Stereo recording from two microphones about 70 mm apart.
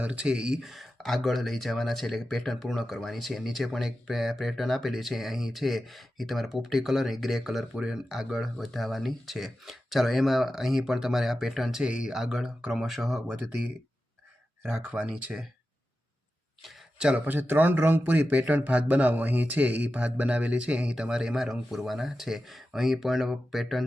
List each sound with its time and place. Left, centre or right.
0.0 s speech: centre
14.6 s speech: centre
17.0 s speech: centre
17.2 s speech: right; by 23.8 s centre